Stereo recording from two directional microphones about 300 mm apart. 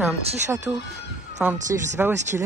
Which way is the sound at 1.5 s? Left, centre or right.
Right.